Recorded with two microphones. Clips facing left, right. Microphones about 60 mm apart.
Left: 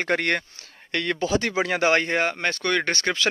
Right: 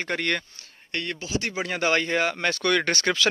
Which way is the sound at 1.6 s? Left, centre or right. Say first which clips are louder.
Left 3 dB; left.